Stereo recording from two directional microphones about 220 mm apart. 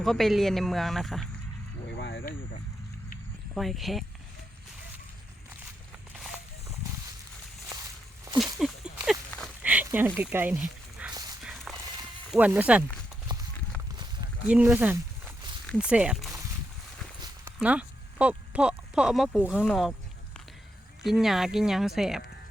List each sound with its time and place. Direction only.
0.0 s speech: centre (ahead or behind)
2.0 s a sound: 55° left (ahead or behind)
3.5 s speech: centre (ahead or behind)
6.1 s walk: centre (ahead or behind)
8.5 s a sound: 5° right (ahead or behind)
10.2 s speech: 10° right (ahead or behind)
11.1 s horse: 15° right (ahead or behind)
11.4 s horse: centre (ahead or behind)
12.3 s speech: 10° right (ahead or behind)
14.4 s speech: 5° right (ahead or behind)
21.0 s speech: centre (ahead or behind)